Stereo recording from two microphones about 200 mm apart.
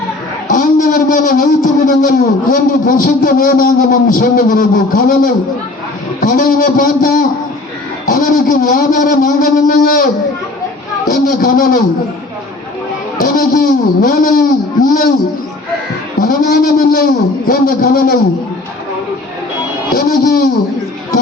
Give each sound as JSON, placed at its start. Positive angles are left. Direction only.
{"t": 0.4, "sound": "music", "side_deg": 40}
{"t": 11.1, "sound": "music", "side_deg": 45}
{"t": 13.2, "sound": "a man's voice", "side_deg": 45}
{"t": 16.2, "sound": "music", "side_deg": 45}
{"t": 20.0, "sound": "music", "side_deg": 45}